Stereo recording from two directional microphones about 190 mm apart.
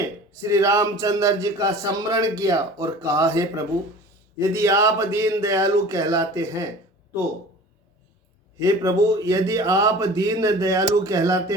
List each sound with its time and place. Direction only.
0.4 s a man's voice: 15° right (ahead or behind)
8.5 s a man's voice: 15° right (ahead or behind)